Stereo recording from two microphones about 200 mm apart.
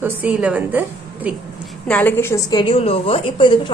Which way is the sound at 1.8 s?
10° left (ahead or behind).